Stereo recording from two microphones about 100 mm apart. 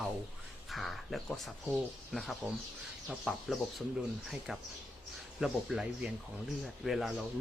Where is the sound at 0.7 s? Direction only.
Centre (ahead or behind).